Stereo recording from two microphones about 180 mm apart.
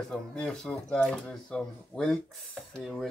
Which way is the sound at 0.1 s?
5° left (ahead or behind).